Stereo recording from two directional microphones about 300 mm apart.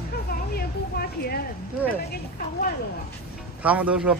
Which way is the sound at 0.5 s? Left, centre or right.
Left.